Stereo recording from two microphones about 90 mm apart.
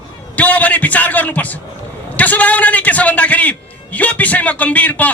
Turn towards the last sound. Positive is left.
turn(degrees=15)  # may be behind; listen again after turning